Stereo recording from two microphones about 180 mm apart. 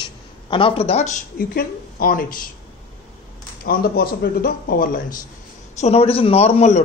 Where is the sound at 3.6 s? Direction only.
55° left (ahead or behind).